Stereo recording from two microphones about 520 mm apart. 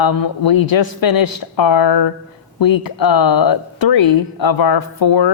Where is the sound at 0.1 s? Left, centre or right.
Left.